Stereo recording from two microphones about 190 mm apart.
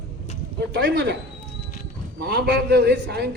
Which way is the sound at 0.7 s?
65° right (ahead or behind).